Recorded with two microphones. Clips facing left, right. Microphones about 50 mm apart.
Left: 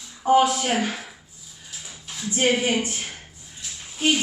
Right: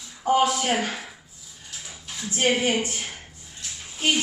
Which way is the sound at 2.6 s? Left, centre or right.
Left.